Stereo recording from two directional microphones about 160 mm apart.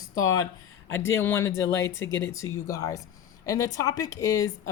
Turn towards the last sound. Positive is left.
turn(degrees=20)  # may be behind; listen again after turning